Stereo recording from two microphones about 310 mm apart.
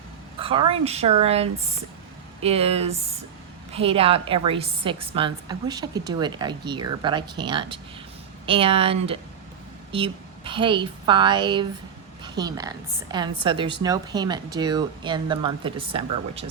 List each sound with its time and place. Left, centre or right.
0.3 s a woman's voice: centre